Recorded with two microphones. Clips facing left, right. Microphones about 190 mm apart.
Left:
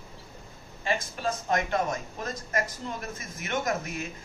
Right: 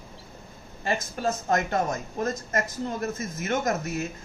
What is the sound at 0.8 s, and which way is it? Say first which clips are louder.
Speech: right 2 dB; 40° right (ahead or behind).